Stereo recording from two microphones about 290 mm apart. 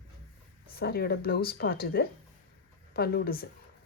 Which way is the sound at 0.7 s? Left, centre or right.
Left.